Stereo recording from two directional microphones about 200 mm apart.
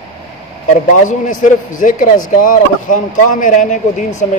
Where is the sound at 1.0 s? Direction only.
40° left (ahead or behind).